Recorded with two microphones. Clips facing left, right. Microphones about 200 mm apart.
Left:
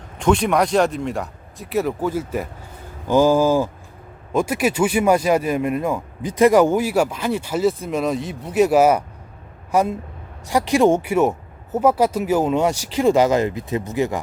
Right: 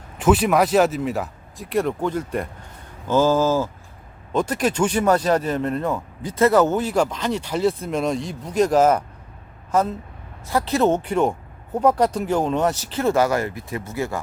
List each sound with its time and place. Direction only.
0.2 s speech: 5° right (ahead or behind); by 14.2 s 15° left (ahead or behind)